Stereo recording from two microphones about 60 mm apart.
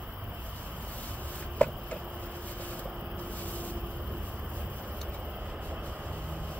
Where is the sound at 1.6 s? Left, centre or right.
Left.